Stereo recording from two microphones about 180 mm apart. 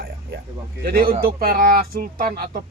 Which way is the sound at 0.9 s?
55° right (ahead or behind).